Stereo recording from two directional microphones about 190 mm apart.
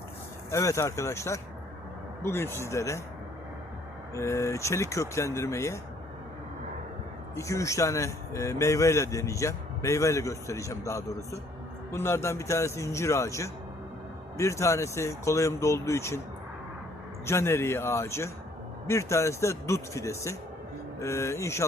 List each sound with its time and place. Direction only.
0.5 s speech: 15° left (ahead or behind)
4.1 s speech: 15° left (ahead or behind)
7.3 s speech: 15° left (ahead or behind)
17.2 s speech: 15° left (ahead or behind)